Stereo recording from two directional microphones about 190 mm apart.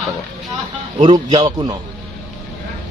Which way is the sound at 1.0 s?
25° right (ahead or behind).